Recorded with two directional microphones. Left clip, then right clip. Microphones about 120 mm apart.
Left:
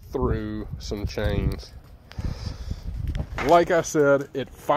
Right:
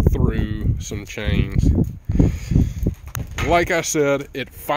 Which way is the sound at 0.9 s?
20° right (ahead or behind).